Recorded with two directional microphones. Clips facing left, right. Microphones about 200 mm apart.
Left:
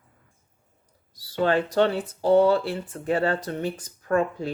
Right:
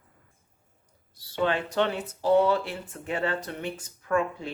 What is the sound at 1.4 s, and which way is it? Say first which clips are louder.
Speech: left 5 dB; 40° left (ahead or behind).